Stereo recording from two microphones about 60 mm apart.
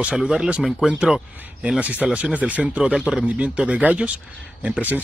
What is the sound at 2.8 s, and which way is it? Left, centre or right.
Speech, centre.